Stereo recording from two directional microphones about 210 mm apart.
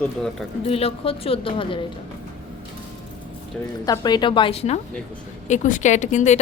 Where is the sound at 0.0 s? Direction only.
5° left (ahead or behind).